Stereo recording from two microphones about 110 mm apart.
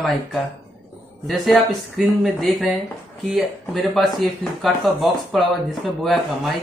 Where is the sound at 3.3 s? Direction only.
Centre (ahead or behind).